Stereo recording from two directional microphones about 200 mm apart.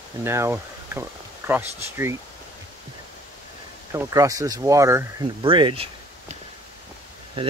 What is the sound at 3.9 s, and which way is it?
Speech, 15° right (ahead or behind).